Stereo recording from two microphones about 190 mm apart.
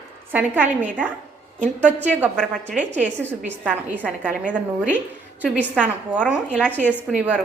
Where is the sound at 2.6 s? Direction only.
40° right (ahead or behind).